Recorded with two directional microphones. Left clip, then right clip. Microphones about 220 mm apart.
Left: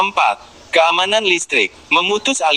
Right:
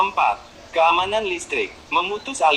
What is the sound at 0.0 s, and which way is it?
A man's voice, 45° left (ahead or behind).